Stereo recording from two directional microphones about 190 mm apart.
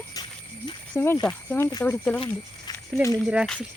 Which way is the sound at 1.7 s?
20° left (ahead or behind).